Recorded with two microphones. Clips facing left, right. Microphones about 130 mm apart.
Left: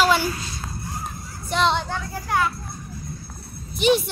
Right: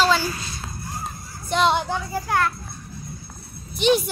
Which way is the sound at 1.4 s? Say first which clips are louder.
Right 2 dB; 5° right (ahead or behind).